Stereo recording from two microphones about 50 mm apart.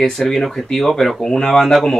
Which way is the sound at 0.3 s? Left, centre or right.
Centre.